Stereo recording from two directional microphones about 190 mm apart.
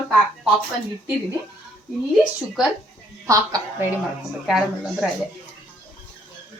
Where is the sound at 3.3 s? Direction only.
15° right (ahead or behind).